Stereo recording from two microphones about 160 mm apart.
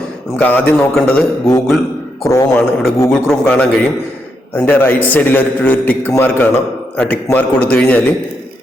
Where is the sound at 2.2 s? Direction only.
20° left (ahead or behind).